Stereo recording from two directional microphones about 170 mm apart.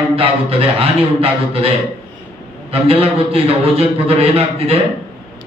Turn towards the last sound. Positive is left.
turn(degrees=-35)  # may be behind; listen again after turning